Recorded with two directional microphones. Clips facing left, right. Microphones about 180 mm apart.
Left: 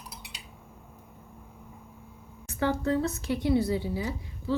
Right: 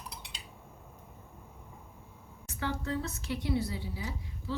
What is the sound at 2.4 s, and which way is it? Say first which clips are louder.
Speech: left 8 dB; 50° left (ahead or behind).